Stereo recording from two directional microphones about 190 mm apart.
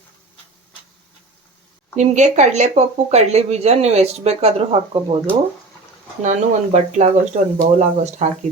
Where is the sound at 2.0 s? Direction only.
40° right (ahead or behind).